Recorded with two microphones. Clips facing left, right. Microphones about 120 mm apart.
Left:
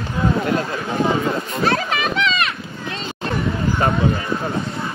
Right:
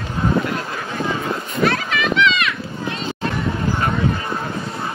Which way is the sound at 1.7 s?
30° left (ahead or behind).